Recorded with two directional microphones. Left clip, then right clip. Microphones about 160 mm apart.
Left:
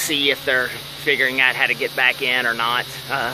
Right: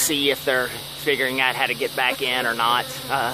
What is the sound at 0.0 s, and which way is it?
Speech, 15° right (ahead or behind).